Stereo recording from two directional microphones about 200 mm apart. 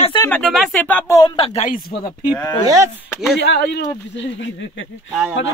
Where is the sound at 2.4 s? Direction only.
20° left (ahead or behind).